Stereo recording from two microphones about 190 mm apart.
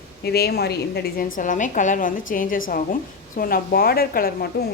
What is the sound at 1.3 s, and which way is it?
A woman's voice, 45° left (ahead or behind).